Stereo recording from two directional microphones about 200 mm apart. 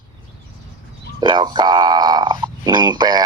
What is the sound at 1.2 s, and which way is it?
Speech, 25° right (ahead or behind).